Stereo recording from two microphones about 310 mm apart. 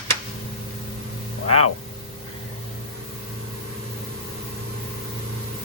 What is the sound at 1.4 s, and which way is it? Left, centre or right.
Speech, left.